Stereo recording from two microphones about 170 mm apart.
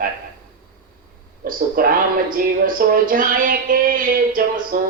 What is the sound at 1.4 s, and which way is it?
Speech, 55° right (ahead or behind).